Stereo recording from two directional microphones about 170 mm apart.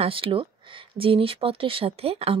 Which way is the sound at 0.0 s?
30° right (ahead or behind).